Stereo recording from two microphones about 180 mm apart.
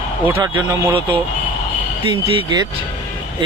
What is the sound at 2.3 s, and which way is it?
Speech, 25° right (ahead or behind).